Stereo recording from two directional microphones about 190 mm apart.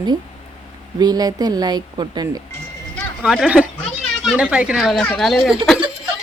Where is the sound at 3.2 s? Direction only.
5° right (ahead or behind).